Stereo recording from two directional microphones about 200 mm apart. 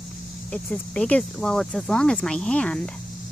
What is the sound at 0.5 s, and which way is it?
Speech, 5° left (ahead or behind).